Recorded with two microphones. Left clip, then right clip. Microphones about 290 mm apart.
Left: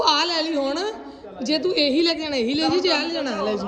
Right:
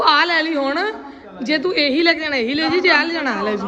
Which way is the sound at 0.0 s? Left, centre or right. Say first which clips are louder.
Right 5 dB; centre.